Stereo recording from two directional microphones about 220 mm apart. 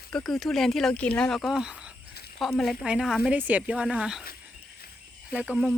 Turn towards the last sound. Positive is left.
turn(degrees=-5)  # may be behind; listen again after turning